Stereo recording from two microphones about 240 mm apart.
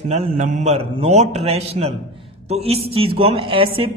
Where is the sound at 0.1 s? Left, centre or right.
Right.